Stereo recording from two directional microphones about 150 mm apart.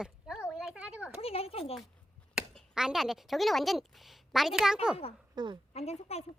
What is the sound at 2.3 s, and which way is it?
Speech, 5° right (ahead or behind).